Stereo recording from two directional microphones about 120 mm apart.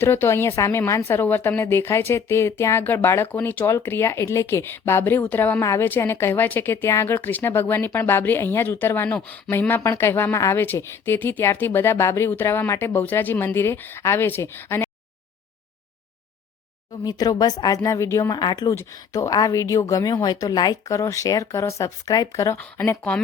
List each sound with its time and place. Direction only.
0.0 s a woman's voice: 20° left (ahead or behind)
17.0 s a woman's voice: 30° left (ahead or behind)
18.7 s a woman's voice: 25° left (ahead or behind)